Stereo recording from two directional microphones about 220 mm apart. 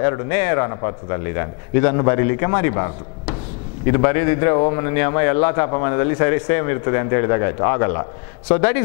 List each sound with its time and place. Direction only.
0.0 s a man's voice: 15° left (ahead or behind)